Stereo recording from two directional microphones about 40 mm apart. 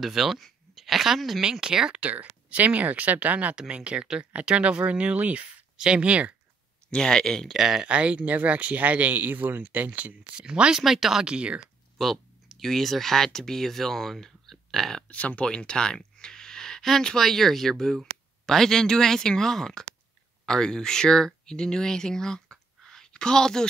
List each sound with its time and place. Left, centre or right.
0.0 s speech: centre
1.4 s speech: centre
2.0 s speech: right
6.9 s speech: centre
7.4 s speech: centre
7.8 s speech: right
10.3 s speech: right
10.8 s speech: centre
11.2 s speech: right
12.0 s speech: centre
15.0 s speech: left
15.4 s a sound: left
17.0 s speech: centre